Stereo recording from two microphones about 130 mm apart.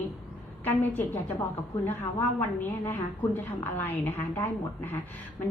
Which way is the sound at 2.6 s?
15° left (ahead or behind).